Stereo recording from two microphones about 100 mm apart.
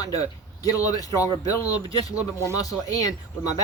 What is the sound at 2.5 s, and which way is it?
Speech, 35° left (ahead or behind).